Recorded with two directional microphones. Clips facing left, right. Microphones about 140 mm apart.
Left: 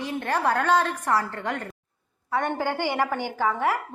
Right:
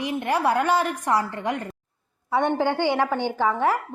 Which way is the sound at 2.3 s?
5° left (ahead or behind).